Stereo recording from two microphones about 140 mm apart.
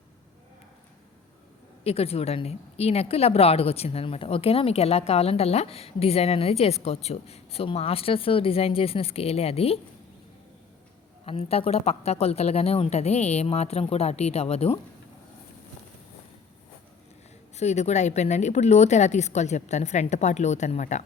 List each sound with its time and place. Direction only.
1.8 s speech: 45° left (ahead or behind)
11.3 s speech: 45° left (ahead or behind)
17.6 s speech: 55° left (ahead or behind)